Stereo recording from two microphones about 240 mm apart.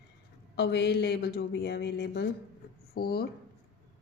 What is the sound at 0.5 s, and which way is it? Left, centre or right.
Speech, left.